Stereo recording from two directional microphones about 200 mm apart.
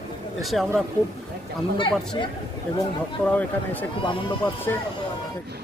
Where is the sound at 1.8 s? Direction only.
25° left (ahead or behind).